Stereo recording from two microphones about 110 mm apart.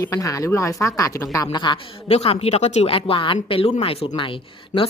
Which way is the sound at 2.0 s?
70° left (ahead or behind).